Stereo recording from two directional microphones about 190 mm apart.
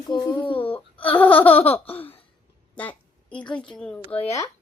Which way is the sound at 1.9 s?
10° left (ahead or behind).